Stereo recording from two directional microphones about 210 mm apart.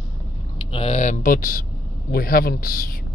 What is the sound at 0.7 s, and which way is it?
Speech, 30° left (ahead or behind).